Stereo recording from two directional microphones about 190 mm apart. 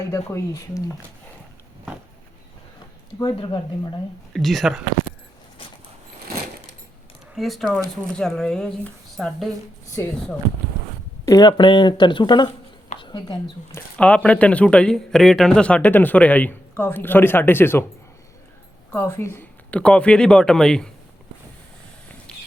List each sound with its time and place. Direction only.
0.0 s a man's voice: 15° left (ahead or behind)
3.2 s speech: 25° left (ahead or behind)
4.3 s speech: centre (ahead or behind)
7.3 s a man's voice: centre (ahead or behind)
11.3 s speech: 20° left (ahead or behind)
13.0 s a sound: 25° left (ahead or behind)
13.7 s a man's voice: 5° left (ahead or behind)
18.9 s speech: 15° left (ahead or behind)
22.3 s a sound: 5° left (ahead or behind)